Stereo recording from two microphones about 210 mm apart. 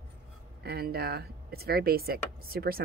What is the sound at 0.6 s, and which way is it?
Speech, 50° right (ahead or behind).